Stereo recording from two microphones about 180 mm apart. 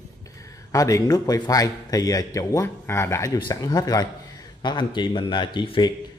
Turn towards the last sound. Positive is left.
turn(degrees=25)  # may be behind; listen again after turning